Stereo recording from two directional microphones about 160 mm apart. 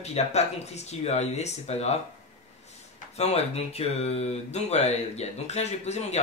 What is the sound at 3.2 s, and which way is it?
Speech, 40° left (ahead or behind).